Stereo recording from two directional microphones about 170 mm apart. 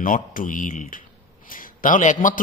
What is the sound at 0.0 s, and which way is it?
A man's voice, 55° left (ahead or behind).